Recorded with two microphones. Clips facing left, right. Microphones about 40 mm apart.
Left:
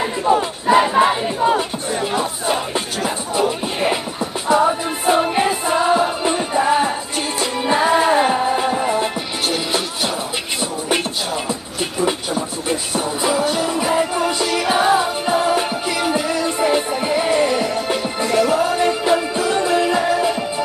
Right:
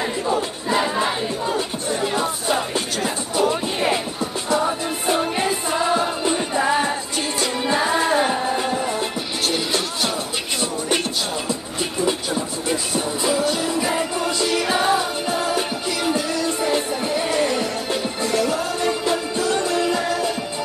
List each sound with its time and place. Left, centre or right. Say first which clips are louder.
0.2 s battle cry: left 5 dB; left
1.9 s music: left 1 dB; centre
3.3 s music: even; centre
12.9 s music: left 3 dB; centre
14.9 s music: left 4 dB; centre
19.3 s music: left 3 dB; centre